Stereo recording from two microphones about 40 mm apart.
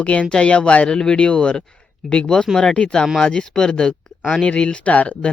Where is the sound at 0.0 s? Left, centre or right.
Left.